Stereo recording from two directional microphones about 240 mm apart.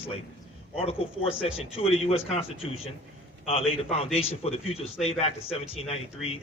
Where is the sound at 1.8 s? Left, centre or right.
Left.